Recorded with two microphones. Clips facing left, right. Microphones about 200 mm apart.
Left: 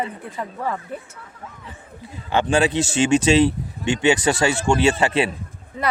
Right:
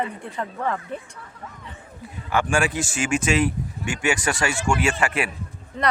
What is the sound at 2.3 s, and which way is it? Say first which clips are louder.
Speech: left 4 dB; 20° left (ahead or behind).